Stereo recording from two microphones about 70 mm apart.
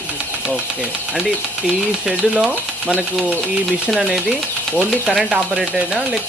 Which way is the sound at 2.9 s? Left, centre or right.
Centre.